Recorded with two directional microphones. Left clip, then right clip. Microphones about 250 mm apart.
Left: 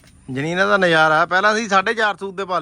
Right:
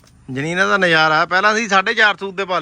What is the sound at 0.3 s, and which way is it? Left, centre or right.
A man's voice, centre.